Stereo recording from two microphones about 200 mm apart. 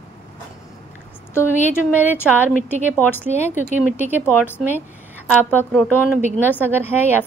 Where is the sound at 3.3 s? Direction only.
35° left (ahead or behind).